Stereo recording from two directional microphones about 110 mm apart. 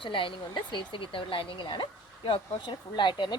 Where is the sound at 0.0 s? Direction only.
50° left (ahead or behind).